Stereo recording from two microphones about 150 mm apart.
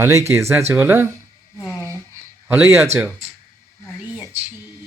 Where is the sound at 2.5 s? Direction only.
15° right (ahead or behind).